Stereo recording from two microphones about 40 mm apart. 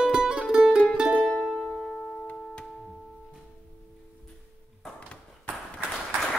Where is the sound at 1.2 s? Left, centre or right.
Left.